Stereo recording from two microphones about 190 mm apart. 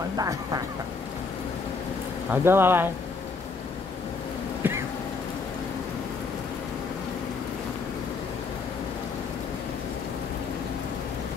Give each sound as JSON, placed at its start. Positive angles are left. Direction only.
{"t": 0.2, "sound": "speech", "side_deg": -20}
{"t": 2.3, "sound": "speech", "side_deg": -10}
{"t": 4.6, "sound": "vehicle", "side_deg": -10}